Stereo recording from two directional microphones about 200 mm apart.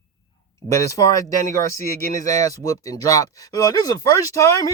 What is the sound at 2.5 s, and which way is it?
Speech, 15° left (ahead or behind).